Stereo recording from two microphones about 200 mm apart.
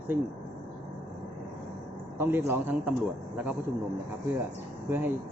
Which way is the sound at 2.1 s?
10° right (ahead or behind).